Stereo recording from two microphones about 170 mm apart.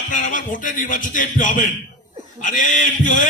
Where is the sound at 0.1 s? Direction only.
50° left (ahead or behind).